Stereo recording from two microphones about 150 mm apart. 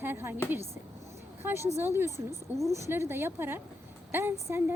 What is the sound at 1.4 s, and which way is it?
A woman's voice, 15° right (ahead or behind).